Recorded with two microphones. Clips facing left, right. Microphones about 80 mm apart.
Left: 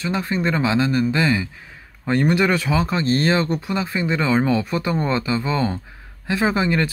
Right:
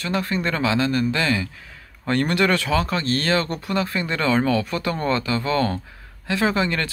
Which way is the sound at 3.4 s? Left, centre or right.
Centre.